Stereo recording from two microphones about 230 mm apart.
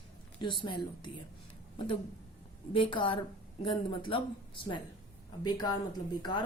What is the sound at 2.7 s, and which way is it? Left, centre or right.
A woman's voice, left.